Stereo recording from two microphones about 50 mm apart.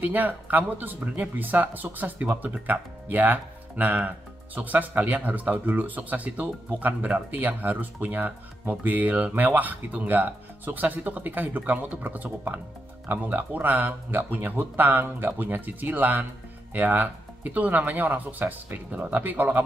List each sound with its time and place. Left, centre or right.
0.0 s speech: right